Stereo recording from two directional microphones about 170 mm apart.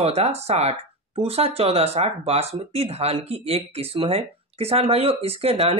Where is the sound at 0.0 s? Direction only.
35° right (ahead or behind).